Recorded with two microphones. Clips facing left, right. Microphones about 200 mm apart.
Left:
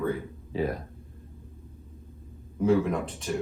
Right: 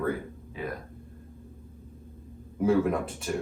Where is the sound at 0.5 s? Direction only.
30° left (ahead or behind).